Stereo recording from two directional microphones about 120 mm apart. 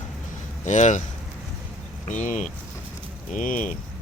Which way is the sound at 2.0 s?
90° left.